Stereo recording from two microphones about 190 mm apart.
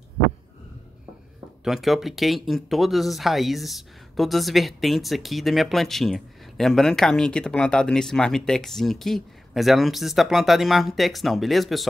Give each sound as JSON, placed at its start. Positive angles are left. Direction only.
{"t": 1.6, "sound": "speech", "side_deg": 0}